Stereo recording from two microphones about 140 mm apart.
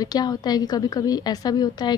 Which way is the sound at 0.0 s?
30° left (ahead or behind).